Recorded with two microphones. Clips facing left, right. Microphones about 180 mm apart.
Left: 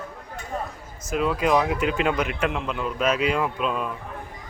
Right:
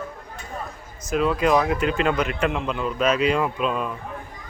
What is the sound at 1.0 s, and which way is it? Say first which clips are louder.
Speech: right 2 dB; 5° left (ahead or behind).